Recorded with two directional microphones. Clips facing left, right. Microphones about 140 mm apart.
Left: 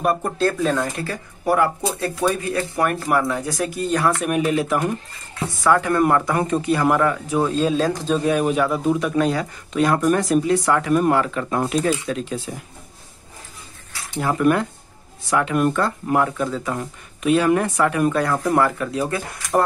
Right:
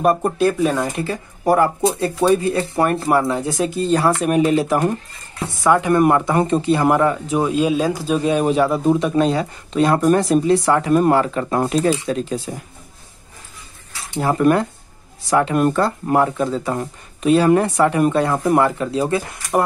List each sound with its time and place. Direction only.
0.4 s speech: 15° right (ahead or behind)
1.4 s speech: 40° right (ahead or behind)
2.0 s speech: 25° right (ahead or behind)
5.6 s speech: 20° right (ahead or behind)
7.4 s speech: 10° right (ahead or behind)
8.2 s speech: 25° right (ahead or behind)
14.1 s speech: 35° right (ahead or behind)